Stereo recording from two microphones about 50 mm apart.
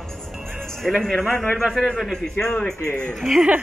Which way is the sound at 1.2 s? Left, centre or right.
Left.